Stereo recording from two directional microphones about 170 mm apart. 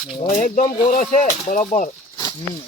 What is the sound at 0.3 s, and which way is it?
Speech, 50° left (ahead or behind).